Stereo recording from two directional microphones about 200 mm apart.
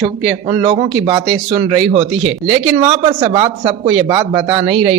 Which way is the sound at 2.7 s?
30° right (ahead or behind).